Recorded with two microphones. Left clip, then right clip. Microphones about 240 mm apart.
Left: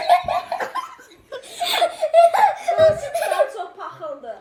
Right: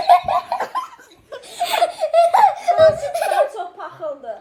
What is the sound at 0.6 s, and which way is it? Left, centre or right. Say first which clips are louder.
Laughter: right 2 dB; centre.